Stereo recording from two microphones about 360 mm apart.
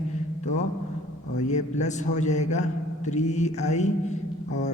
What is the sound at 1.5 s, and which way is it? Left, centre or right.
Speech, centre.